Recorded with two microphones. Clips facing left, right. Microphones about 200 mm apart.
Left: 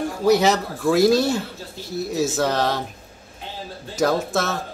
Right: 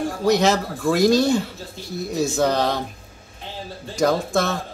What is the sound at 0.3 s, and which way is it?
Speech, 5° left (ahead or behind).